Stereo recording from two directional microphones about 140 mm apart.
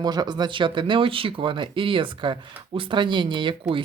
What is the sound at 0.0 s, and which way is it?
Speech, 30° right (ahead or behind).